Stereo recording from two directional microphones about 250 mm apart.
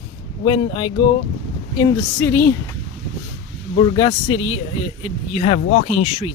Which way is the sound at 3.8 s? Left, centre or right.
Centre.